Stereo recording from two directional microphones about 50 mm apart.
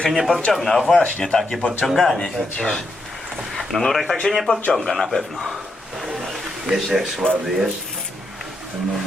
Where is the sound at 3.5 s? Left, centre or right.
Centre.